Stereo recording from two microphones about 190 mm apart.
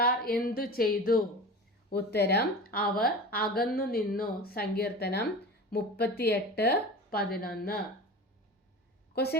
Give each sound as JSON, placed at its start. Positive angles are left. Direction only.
{"t": 0.0, "sound": "a woman's voice", "side_deg": 50}
{"t": 9.1, "sound": "speech", "side_deg": 55}